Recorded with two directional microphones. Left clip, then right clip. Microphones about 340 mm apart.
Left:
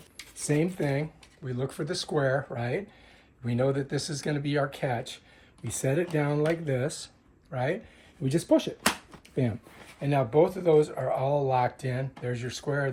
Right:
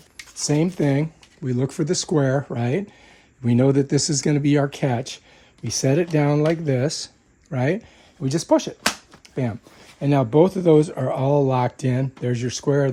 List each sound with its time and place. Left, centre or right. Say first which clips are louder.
0.4 s speech: right 7 dB; right
8.5 s speech: right 5 dB; centre
10.0 s speech: right 6 dB; right